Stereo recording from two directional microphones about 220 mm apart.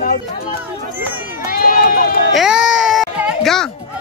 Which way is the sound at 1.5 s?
45° left (ahead or behind).